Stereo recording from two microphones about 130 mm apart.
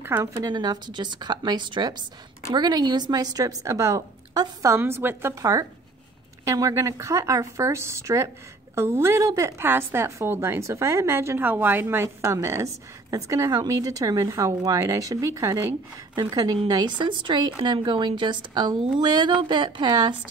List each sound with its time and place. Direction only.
0.0 s a woman's voice: 15° right (ahead or behind)
0.4 s a woman's voice: 30° right (ahead or behind)